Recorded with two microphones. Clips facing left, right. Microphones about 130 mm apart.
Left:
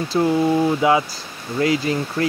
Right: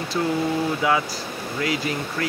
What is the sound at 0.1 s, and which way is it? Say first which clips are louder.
Speech: left 6 dB; 30° left (ahead or behind).